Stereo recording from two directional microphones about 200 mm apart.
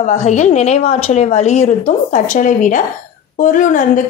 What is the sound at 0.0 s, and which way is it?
A woman's voice, 35° left (ahead or behind).